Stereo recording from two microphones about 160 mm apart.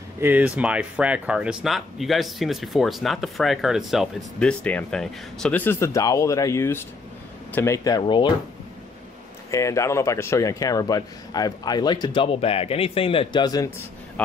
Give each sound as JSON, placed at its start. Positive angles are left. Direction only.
{"t": 0.2, "sound": "speech", "side_deg": -10}
{"t": 9.5, "sound": "speech", "side_deg": 20}